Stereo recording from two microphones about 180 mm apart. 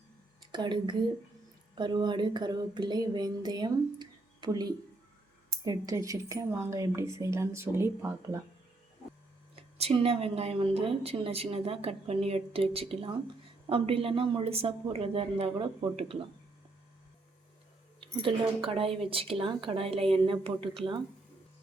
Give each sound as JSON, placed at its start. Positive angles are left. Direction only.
{"t": 0.5, "sound": "a woman's voice", "side_deg": -25}
{"t": 9.7, "sound": "a woman's voice", "side_deg": -35}
{"t": 18.0, "sound": "a woman's voice", "side_deg": -25}